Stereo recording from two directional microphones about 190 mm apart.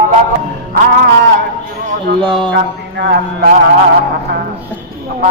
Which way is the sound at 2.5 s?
65° right (ahead or behind).